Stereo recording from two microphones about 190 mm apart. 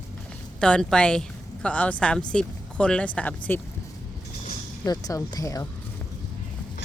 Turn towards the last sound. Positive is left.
turn(degrees=15)  # may be behind; listen again after turning